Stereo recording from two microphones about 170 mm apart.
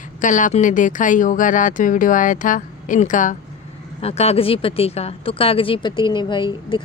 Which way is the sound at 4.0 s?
35° left (ahead or behind).